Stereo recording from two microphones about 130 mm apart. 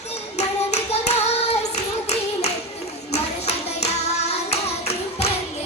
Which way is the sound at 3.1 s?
55° left (ahead or behind).